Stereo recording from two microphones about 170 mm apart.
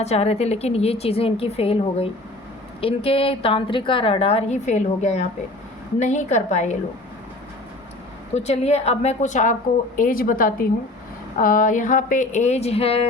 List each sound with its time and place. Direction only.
0.0 s a woman's voice: 40° left (ahead or behind)
8.4 s a woman's voice: 40° left (ahead or behind)